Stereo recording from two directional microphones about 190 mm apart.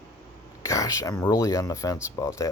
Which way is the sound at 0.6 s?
15° left (ahead or behind).